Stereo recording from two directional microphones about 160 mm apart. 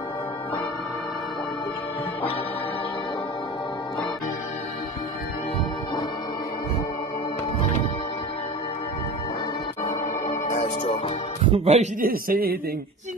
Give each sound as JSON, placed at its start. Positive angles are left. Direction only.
{"t": 9.8, "sound": "music", "side_deg": 40}
{"t": 11.4, "sound": "speech", "side_deg": -40}
{"t": 12.0, "sound": "a man's voice", "side_deg": -65}